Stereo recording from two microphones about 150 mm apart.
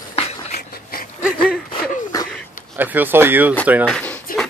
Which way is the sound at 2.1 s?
25° left (ahead or behind).